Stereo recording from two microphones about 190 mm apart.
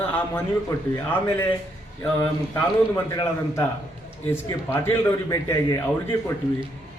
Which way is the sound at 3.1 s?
20° left (ahead or behind).